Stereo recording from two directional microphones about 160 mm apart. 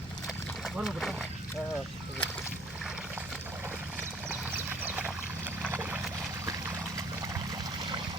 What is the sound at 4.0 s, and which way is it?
Vehicle, 10° right (ahead or behind).